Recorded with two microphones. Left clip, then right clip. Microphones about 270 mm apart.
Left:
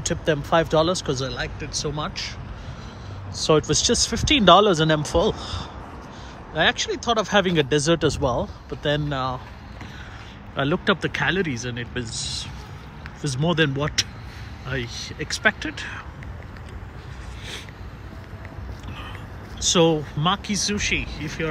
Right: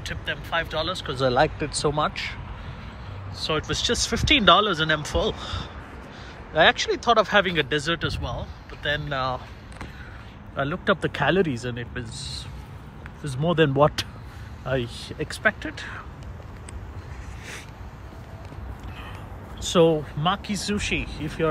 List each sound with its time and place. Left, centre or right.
0.1 s speech: left
1.2 s speech: centre
3.3 s speech: centre
10.5 s speech: centre
19.6 s speech: centre